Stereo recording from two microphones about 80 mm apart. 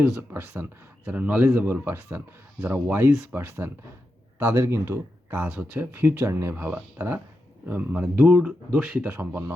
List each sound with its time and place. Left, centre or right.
0.2 s speech: right
1.0 s speech: centre
1.5 s speech: right
5.9 s speech: right